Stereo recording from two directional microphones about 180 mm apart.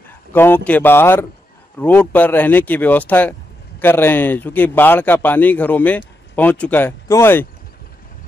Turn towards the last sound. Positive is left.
turn(degrees=15)  # may be behind; listen again after turning